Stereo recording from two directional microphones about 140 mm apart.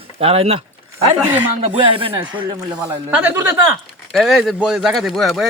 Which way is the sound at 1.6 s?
40° right (ahead or behind).